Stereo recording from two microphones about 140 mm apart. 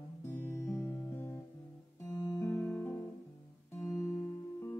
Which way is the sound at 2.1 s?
20° left (ahead or behind).